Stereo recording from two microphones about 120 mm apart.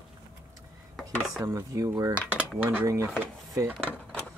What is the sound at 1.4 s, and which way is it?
Speech, 25° right (ahead or behind).